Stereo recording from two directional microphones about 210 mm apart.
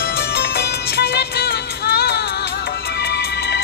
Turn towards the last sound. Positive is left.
turn(degrees=50)  # may be behind; listen again after turning